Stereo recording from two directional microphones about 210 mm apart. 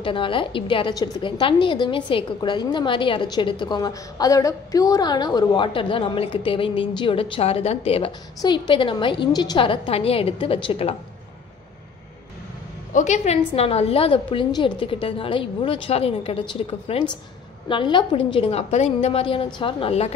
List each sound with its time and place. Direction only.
0.0 s a woman's voice: 25° left (ahead or behind)
12.9 s a woman's voice: 35° left (ahead or behind)